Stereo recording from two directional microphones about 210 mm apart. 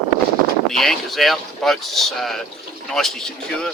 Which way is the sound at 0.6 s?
Centre (ahead or behind).